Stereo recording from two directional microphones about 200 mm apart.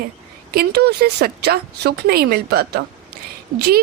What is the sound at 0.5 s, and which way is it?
A woman's voice, 50° right (ahead or behind).